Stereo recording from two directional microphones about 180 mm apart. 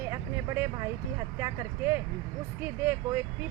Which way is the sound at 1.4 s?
15° right (ahead or behind).